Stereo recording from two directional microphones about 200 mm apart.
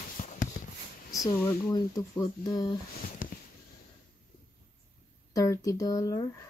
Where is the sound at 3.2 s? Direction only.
40° left (ahead or behind).